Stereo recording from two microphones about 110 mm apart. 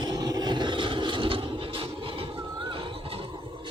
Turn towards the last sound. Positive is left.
turn(degrees=-50)  # may be behind; listen again after turning